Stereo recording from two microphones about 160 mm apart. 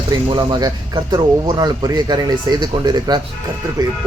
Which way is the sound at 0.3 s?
30° right (ahead or behind).